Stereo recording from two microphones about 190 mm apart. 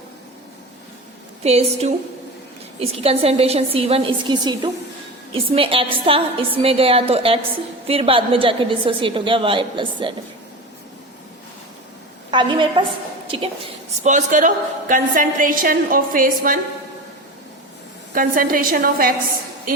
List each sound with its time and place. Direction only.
1.5 s a woman's voice: 35° right (ahead or behind)
12.3 s a woman's voice: 25° right (ahead or behind)
14.0 s a woman's voice: 40° right (ahead or behind)
18.1 s a woman's voice: 45° right (ahead or behind)